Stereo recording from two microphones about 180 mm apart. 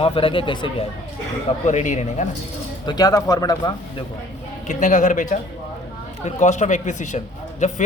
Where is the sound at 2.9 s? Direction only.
20° left (ahead or behind).